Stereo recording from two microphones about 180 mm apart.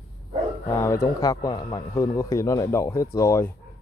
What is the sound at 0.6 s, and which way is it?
Speech, 15° left (ahead or behind).